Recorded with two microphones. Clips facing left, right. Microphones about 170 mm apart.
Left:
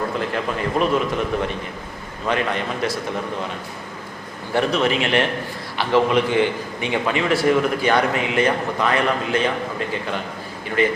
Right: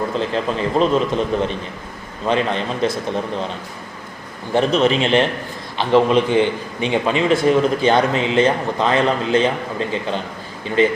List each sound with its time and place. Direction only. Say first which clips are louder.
0.2 s a man's voice: right 3 dB; 25° right (ahead or behind)
4.5 s a man's voice: right 4 dB; 20° right (ahead or behind)